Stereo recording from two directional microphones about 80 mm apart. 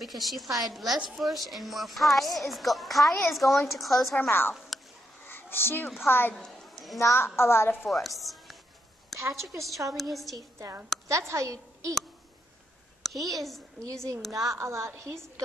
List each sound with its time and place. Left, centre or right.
0.0 s a woman's voice: centre
4.2 s a woman's voice: left
5.2 s a sound: left
5.9 s a woman's voice: left
6.3 s a sound: centre
7.0 s a woman's voice: left
7.7 s a woman's voice: centre
11.1 s a woman's voice: right
13.0 s speech: centre
14.3 s a woman's voice: right